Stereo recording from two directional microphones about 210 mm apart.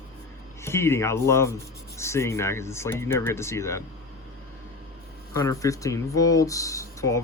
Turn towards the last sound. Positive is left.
turn(degrees=15)  # may be behind; listen again after turning